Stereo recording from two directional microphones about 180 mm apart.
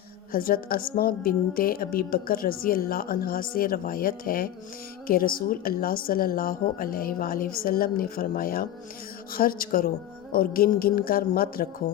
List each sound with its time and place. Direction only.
0.3 s a woman's voice: 55° left (ahead or behind)